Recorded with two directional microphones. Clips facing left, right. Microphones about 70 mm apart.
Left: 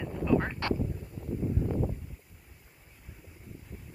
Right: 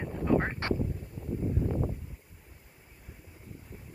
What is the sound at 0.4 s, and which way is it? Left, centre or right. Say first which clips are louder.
Duck: even; right.